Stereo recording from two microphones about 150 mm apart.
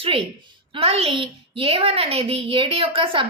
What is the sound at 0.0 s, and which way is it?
A woman's voice, 40° right (ahead or behind).